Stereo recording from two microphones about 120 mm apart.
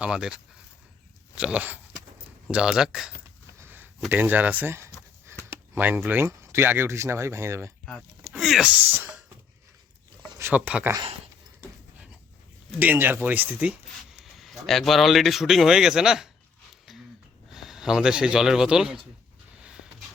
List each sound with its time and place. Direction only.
0.0 s speech: 5° right (ahead or behind)
3.6 s a sound: 15° right (ahead or behind)
4.1 s speech: 15° right (ahead or behind)
5.5 s a sound: 15° right (ahead or behind)
6.1 s speech: 20° right (ahead or behind)
8.4 s speech: centre (ahead or behind)
8.9 s speech: 15° right (ahead or behind)
10.3 s speech: 15° right (ahead or behind)
12.8 s speech: 15° right (ahead or behind)
14.1 s speech: centre (ahead or behind)
17.5 s speech: 5° right (ahead or behind)
19.5 s a sound: 5° right (ahead or behind)